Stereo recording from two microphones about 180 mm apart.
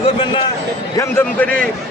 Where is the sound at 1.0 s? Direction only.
10° left (ahead or behind).